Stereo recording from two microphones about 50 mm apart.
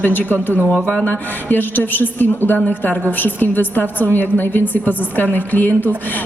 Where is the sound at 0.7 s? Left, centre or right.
Left.